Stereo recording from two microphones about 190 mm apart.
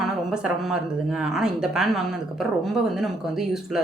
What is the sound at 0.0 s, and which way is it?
Speech, centre (ahead or behind).